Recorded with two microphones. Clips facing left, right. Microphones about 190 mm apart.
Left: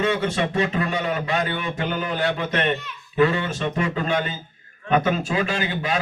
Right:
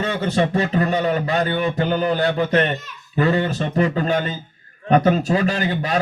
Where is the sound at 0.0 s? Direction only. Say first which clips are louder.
Right 2 dB; 35° right (ahead or behind).